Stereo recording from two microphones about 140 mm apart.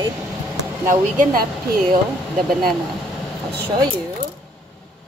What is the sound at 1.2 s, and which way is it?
Speech, 90° right.